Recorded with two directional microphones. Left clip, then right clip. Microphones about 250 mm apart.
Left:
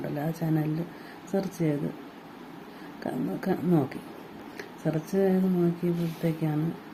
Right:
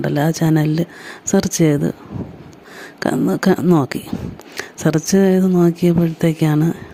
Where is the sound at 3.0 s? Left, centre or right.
Right.